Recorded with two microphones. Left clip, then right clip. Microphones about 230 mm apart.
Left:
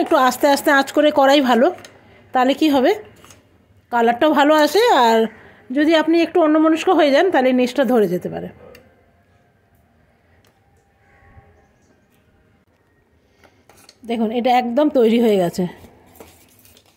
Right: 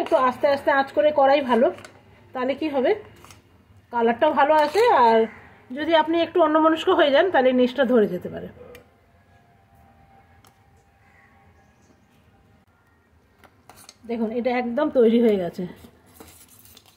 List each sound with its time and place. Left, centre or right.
0.1 s a woman's voice: left
5.8 s a woman's voice: left
14.0 s a woman's voice: left